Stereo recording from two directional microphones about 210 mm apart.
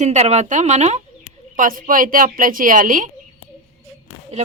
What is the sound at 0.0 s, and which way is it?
Speech, 30° right (ahead or behind).